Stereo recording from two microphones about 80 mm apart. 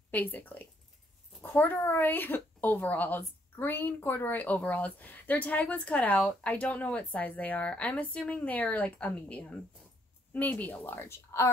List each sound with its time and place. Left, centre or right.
0.1 s a woman's voice: left